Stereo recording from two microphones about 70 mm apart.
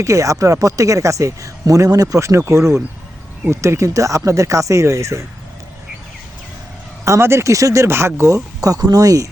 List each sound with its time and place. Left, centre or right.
0.0 s speech: right
7.0 s speech: right
8.6 s speech: right